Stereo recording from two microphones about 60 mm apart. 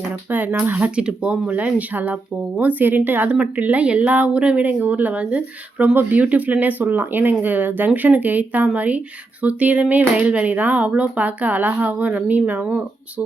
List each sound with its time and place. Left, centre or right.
0.3 s speech: right
0.9 s speech: centre